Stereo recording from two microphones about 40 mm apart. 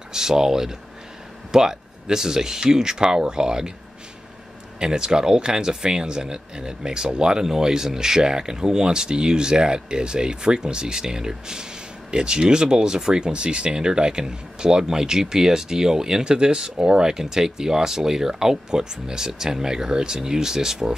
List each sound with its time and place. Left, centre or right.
0.1 s speech: centre
4.7 s speech: centre